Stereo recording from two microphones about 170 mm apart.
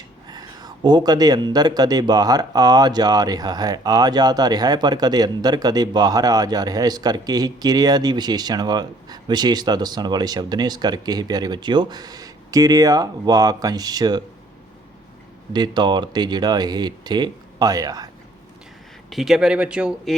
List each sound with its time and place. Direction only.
0.3 s speech: 25° right (ahead or behind)
15.5 s speech: 25° right (ahead or behind)
19.1 s speech: centre (ahead or behind)